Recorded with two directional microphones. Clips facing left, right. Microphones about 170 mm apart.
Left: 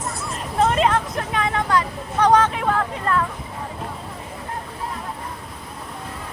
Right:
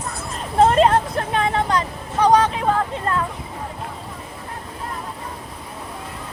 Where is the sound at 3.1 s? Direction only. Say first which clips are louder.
Left 3 dB; 25° right (ahead or behind).